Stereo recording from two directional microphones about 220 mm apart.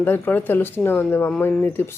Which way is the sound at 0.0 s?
10° left (ahead or behind).